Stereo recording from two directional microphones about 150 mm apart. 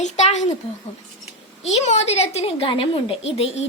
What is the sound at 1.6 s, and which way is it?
A woman's voice, 45° left (ahead or behind).